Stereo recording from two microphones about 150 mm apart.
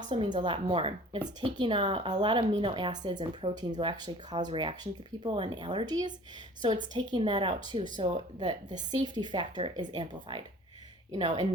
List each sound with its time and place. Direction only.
0.1 s speech: 30° right (ahead or behind)